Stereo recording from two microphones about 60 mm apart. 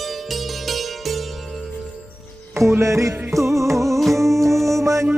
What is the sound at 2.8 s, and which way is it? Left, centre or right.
Music, right.